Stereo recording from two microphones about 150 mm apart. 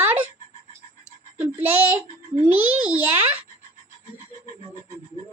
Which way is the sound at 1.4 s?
15° right (ahead or behind).